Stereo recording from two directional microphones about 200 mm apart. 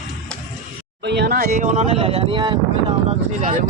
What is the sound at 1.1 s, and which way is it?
Speech, 55° right (ahead or behind).